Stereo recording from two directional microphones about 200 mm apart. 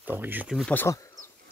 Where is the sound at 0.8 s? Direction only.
15° left (ahead or behind).